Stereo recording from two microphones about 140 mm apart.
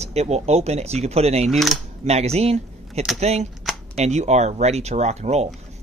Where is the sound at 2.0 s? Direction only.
50° right (ahead or behind).